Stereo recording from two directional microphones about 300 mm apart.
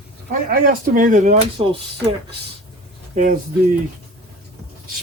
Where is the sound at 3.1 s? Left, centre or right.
Right.